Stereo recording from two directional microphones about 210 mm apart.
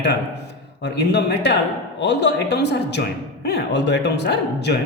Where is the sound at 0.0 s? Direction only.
55° left (ahead or behind).